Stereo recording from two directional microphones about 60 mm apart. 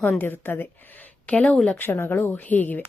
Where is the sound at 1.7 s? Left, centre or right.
Left.